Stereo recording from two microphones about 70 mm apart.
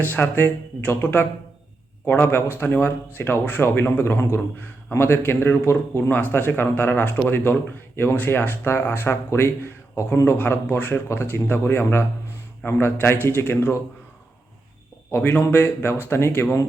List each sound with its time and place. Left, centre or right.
0.0 s speech: left
6.1 s speech: left
15.1 s speech: left